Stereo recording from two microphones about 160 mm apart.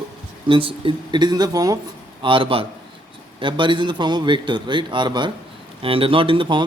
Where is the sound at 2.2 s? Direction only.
30° right (ahead or behind).